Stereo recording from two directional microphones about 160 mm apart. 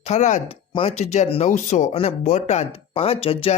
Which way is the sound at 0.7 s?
35° left (ahead or behind).